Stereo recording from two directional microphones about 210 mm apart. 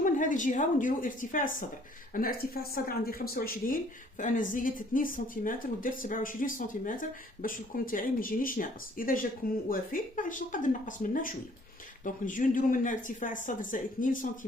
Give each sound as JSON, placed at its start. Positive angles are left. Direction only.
{"t": 0.0, "sound": "speech", "side_deg": 40}